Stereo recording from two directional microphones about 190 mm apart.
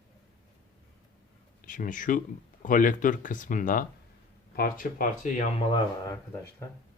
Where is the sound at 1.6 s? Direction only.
45° left (ahead or behind).